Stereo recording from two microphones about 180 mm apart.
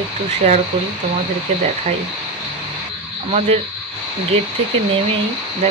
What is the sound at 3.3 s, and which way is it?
Speech, 35° right (ahead or behind).